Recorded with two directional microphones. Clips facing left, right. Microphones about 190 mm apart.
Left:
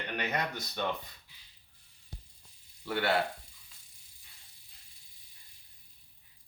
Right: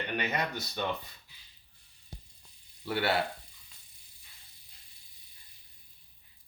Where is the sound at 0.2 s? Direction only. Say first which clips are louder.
Left 1 dB; 5° right (ahead or behind).